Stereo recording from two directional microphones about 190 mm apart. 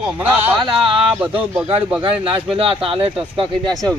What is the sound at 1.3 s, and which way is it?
Speech, 10° right (ahead or behind).